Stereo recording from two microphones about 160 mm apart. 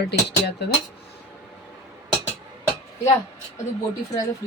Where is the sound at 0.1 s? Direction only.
90° left.